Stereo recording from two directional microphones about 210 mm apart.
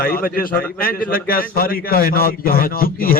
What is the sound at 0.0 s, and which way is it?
A man's voice, 45° left (ahead or behind).